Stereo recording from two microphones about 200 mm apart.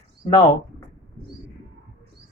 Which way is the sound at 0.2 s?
25° left (ahead or behind).